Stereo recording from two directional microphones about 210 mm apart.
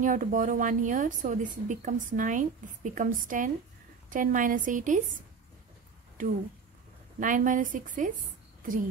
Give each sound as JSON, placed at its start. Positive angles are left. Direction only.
{"t": 0.0, "sound": "a woman's voice", "side_deg": -40}
{"t": 6.2, "sound": "a woman's voice", "side_deg": -35}